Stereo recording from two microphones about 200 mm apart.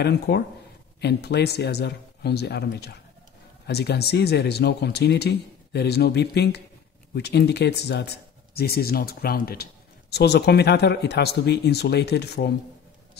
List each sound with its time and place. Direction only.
0.0 s speech: 55° left (ahead or behind)